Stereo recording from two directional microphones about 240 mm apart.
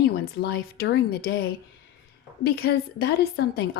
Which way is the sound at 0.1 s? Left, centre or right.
Left.